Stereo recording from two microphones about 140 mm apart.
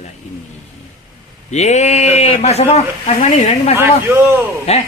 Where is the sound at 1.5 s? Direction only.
55° left (ahead or behind).